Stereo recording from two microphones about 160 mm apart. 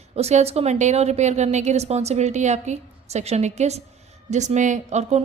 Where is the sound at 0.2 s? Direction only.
40° right (ahead or behind).